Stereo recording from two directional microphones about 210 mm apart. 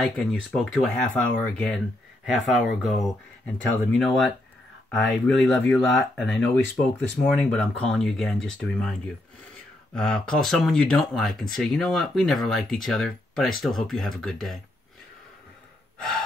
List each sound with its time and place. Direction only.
0.0 s speech: centre (ahead or behind)
4.0 s speech: centre (ahead or behind)
9.9 s speech: 5° left (ahead or behind)